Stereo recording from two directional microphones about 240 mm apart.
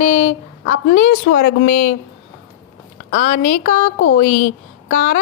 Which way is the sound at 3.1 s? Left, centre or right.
Left.